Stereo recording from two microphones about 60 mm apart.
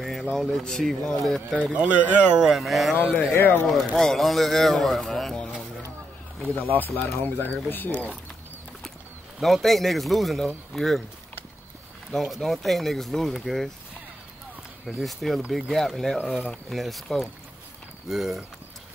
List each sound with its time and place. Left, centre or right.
0.0 s speech: centre
1.6 s speech: centre
3.3 s speech: left
3.8 s speech: centre
5.3 s music: centre
6.4 s speech: left
9.4 s speech: centre
12.1 s speech: centre
15.0 s speech: centre